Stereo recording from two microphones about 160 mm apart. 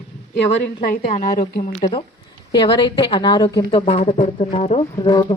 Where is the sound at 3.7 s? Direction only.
40° left (ahead or behind).